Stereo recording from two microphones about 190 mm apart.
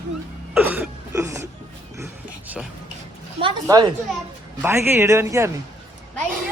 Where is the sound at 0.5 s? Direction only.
10° right (ahead or behind).